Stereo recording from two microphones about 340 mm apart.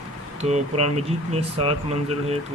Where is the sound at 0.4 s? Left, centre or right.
Centre.